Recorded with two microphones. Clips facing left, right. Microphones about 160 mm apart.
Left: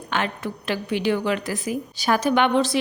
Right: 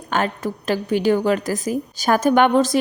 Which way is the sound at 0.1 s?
40° right (ahead or behind).